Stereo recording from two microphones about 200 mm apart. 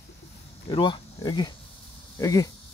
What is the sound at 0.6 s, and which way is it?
Speech, 25° left (ahead or behind).